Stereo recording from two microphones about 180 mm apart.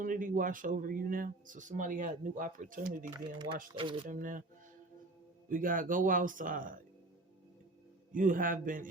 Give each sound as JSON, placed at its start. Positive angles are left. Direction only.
{"t": 0.0, "sound": "speech", "side_deg": -50}
{"t": 3.8, "sound": "speech", "side_deg": -30}
{"t": 4.1, "sound": "speech", "side_deg": -50}
{"t": 5.5, "sound": "speech", "side_deg": -50}
{"t": 8.1, "sound": "speech", "side_deg": -50}